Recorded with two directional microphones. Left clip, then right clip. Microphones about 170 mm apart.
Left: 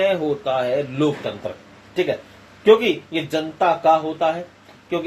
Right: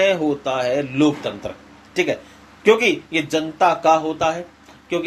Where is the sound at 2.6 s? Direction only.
30° right (ahead or behind).